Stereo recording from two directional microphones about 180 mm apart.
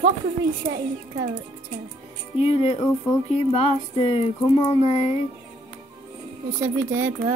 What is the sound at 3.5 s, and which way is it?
Speech, 35° left (ahead or behind).